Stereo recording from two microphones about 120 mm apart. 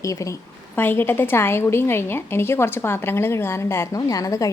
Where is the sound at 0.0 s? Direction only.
25° left (ahead or behind).